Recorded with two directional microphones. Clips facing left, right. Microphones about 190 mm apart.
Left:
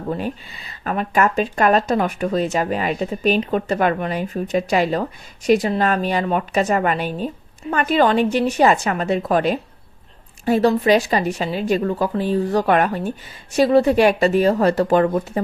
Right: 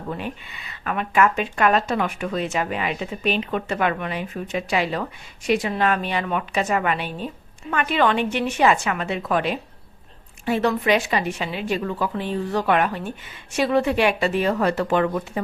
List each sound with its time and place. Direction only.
0.1 s speech: 35° left (ahead or behind)